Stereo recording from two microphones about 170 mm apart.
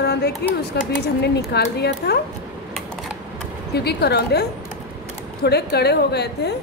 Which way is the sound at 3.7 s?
70° left (ahead or behind).